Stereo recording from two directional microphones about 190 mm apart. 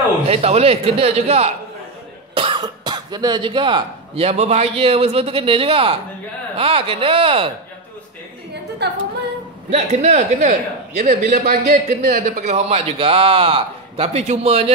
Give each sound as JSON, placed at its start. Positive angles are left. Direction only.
{"t": 0.3, "sound": "a man's voice", "side_deg": -30}
{"t": 8.8, "sound": "a capella", "side_deg": -60}
{"t": 9.7, "sound": "a man's voice", "side_deg": -35}
{"t": 11.2, "sound": "a man's voice", "side_deg": -55}